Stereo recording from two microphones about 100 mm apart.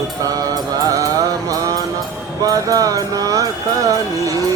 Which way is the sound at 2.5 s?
35° right (ahead or behind).